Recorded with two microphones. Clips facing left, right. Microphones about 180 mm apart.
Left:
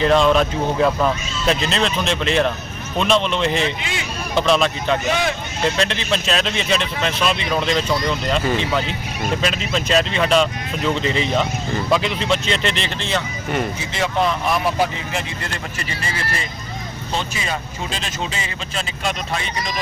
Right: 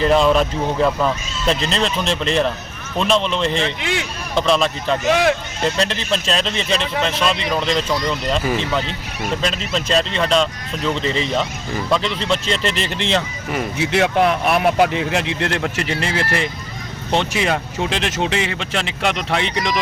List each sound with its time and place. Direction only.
0.0 s speech: centre (ahead or behind)
3.8 s speech: 65° right (ahead or behind)
4.4 s speech: centre (ahead or behind)
13.7 s speech: 65° right (ahead or behind)